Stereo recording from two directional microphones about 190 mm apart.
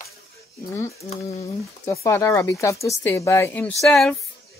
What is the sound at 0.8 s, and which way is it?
Speech, 15° left (ahead or behind).